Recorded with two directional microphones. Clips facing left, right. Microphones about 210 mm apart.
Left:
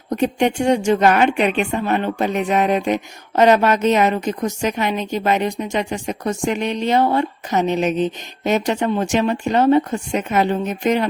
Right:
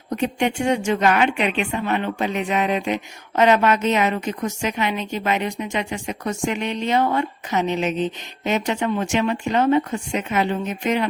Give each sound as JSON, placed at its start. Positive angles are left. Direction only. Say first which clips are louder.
{"t": 0.1, "sound": "a woman's voice", "louder": "left 4 dB", "side_deg": 40}